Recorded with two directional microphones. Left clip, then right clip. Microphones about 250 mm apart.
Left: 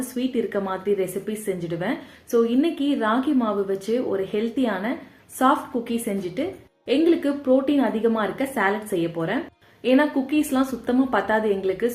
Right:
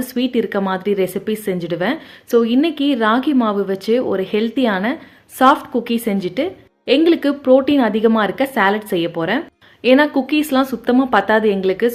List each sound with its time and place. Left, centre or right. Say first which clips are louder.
0.2 s speech: right 6 dB; right